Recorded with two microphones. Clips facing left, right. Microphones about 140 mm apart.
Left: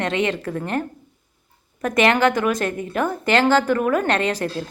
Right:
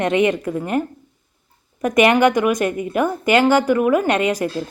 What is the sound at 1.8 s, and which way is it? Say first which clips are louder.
Speech: right 3 dB; 15° right (ahead or behind).